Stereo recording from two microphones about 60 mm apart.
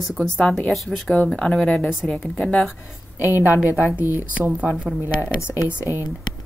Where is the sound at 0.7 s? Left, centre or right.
Centre.